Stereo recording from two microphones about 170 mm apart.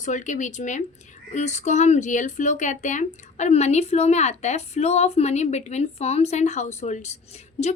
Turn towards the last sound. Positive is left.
turn(degrees=40)  # may be behind; listen again after turning